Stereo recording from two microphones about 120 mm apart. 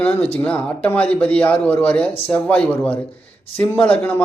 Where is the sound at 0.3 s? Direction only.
10° left (ahead or behind).